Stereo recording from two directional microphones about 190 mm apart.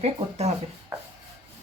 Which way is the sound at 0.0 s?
35° right (ahead or behind).